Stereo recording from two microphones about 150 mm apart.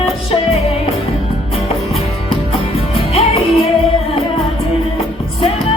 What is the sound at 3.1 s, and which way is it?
Music, 40° left (ahead or behind).